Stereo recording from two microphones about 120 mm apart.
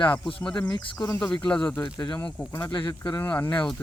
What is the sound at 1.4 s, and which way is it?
Speech, 10° left (ahead or behind).